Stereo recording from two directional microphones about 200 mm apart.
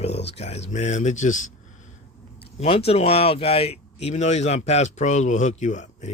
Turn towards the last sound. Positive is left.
turn(degrees=35)  # may be behind; listen again after turning